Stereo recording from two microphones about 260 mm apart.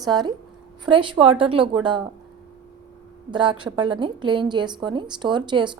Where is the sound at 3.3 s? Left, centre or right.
Centre.